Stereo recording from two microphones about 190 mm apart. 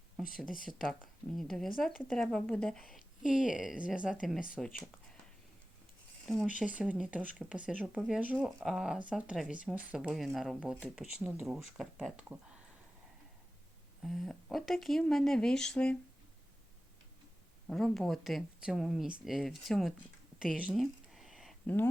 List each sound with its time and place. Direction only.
0.5 s speech: 45° left (ahead or behind)
0.9 s speech: centre (ahead or behind)
6.2 s speech: centre (ahead or behind)
14.0 s speech: centre (ahead or behind)
17.7 s speech: centre (ahead or behind)
20.4 s a sound: 5° right (ahead or behind)